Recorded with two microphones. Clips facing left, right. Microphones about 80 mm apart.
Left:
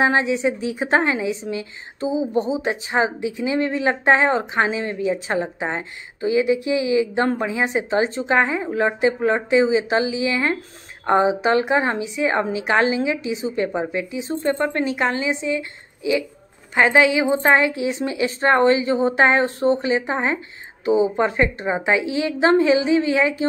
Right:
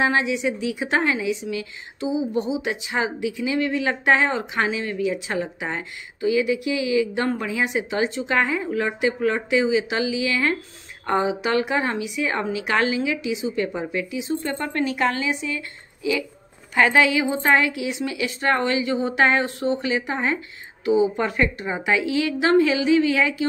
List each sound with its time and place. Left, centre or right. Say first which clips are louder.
0.0 s a woman's voice: left 3 dB; left